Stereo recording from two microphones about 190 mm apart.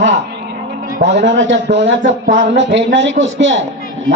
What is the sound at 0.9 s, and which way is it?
A man's voice, 65° right (ahead or behind).